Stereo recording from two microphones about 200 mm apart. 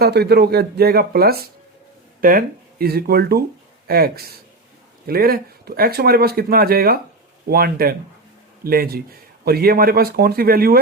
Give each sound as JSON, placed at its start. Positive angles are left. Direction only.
{"t": 0.0, "sound": "speech", "side_deg": -55}